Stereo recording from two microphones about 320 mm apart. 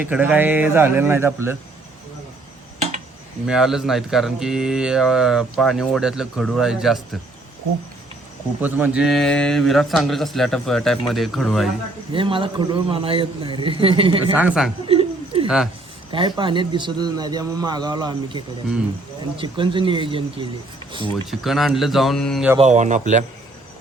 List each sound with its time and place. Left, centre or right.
0.0 s speech: centre
3.4 s speech: centre
8.6 s speech: centre
12.1 s a man's voice: centre
14.4 s speech: centre
14.8 s a sound: centre
15.4 s speech: centre
16.1 s a man's voice: centre
21.2 s speech: centre
22.5 s speech: right